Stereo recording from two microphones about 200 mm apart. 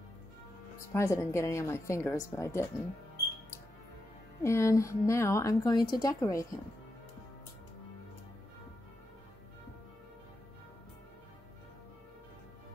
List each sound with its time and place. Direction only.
0.9 s a woman's voice: 15° left (ahead or behind)
4.4 s a woman's voice: 15° left (ahead or behind)